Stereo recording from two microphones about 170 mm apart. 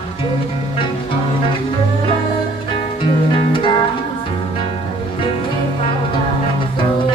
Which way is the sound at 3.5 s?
30° left (ahead or behind).